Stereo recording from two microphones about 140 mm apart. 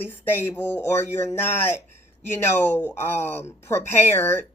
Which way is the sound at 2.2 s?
15° left (ahead or behind).